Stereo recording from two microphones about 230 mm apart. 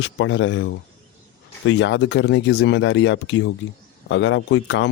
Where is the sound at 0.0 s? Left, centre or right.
Left.